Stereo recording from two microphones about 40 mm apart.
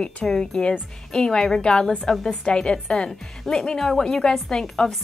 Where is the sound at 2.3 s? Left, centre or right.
Left.